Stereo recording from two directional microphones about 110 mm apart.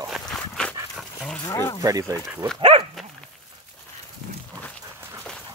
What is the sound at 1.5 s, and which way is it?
Speech, 25° left (ahead or behind).